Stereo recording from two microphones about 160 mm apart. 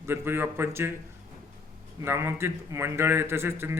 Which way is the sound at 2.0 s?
15° right (ahead or behind).